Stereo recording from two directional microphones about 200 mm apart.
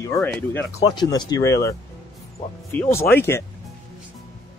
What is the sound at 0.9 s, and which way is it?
Speech, 20° left (ahead or behind).